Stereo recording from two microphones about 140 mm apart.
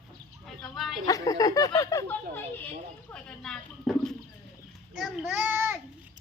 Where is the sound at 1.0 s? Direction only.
25° left (ahead or behind).